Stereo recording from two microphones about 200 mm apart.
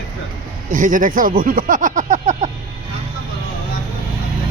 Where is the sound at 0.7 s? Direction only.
40° right (ahead or behind).